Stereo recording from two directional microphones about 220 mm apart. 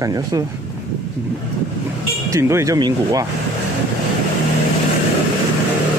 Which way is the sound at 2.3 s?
15° right (ahead or behind).